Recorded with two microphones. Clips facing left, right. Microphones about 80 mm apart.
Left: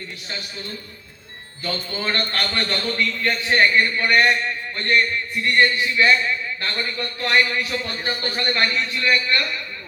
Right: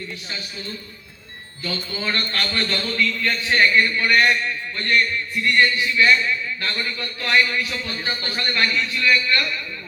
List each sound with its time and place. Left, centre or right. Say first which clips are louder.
1.6 s a man's voice: left 1 dB; left
7.9 s speech: left 1 dB; centre
8.4 s a man's voice: even; left